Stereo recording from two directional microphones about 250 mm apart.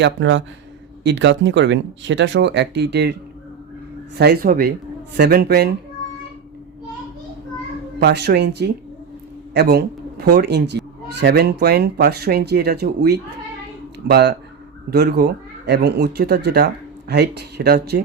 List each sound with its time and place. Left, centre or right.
0.0 s speech: right
4.2 s speech: right
7.9 s speech: right